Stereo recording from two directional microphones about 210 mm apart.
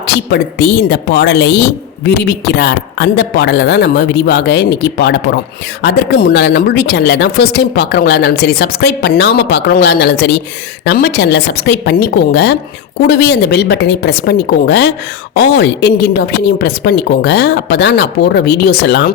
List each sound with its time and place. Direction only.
0.1 s a woman's voice: 50° left (ahead or behind)